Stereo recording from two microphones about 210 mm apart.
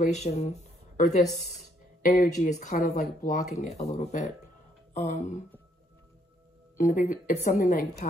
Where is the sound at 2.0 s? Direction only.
40° left (ahead or behind).